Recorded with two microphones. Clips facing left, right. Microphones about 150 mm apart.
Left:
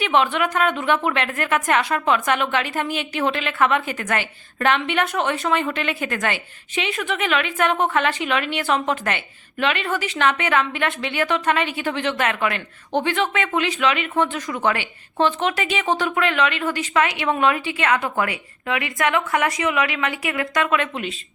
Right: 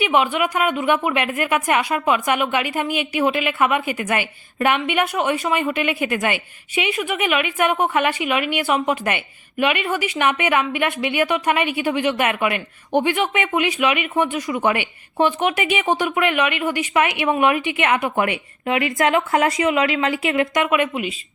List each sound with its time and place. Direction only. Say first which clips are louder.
0.0 s a woman's voice: right 1 dB; 10° right (ahead or behind)